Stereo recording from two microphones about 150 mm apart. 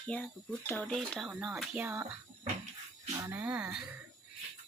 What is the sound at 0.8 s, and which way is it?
Speech, centre (ahead or behind).